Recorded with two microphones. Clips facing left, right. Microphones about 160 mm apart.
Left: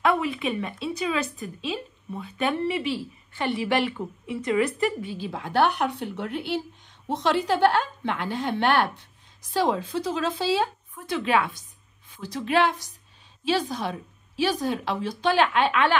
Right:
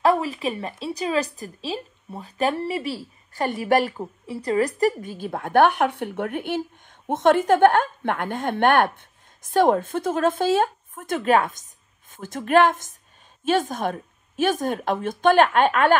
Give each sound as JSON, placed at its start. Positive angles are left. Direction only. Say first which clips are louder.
{"t": 0.0, "sound": "a woman's voice", "louder": "right 3 dB", "side_deg": -35}